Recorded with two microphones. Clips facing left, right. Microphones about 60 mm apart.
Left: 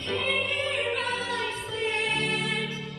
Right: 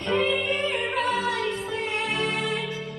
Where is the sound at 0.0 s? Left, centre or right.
Right.